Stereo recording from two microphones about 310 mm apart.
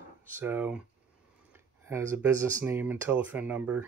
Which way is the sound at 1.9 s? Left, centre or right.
Centre.